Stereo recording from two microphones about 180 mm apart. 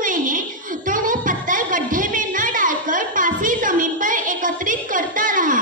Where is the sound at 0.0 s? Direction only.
45° right (ahead or behind).